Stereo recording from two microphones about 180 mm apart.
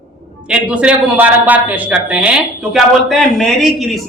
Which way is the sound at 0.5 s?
5° right (ahead or behind).